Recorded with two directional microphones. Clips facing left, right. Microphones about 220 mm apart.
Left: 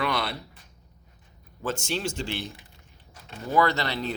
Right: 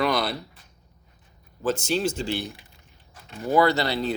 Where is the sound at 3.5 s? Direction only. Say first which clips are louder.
Right 4 dB; 35° right (ahead or behind).